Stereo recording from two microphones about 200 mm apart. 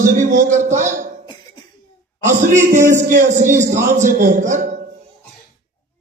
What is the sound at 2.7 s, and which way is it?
Speech, 15° right (ahead or behind).